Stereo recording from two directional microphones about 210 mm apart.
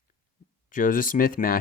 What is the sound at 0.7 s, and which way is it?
Speech, 40° left (ahead or behind).